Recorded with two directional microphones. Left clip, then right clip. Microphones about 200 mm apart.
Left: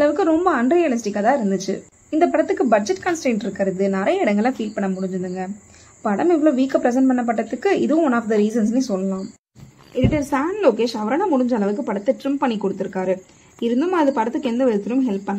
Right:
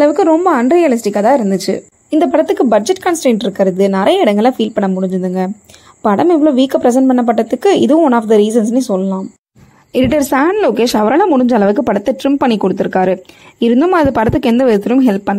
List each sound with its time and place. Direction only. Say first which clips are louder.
0.0 s a woman's voice: right 7 dB; 35° right (ahead or behind)
9.9 s a woman's voice: right 9 dB; 50° right (ahead or behind)